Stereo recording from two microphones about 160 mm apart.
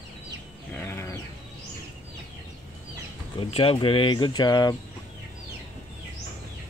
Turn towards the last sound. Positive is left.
turn(degrees=25)  # may be behind; listen again after turning